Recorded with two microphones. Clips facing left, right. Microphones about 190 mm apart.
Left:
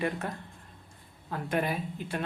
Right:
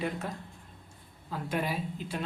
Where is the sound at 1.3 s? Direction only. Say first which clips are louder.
Left 2 dB; 55° left (ahead or behind).